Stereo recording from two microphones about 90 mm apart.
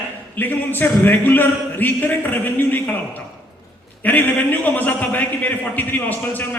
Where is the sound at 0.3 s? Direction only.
20° left (ahead or behind).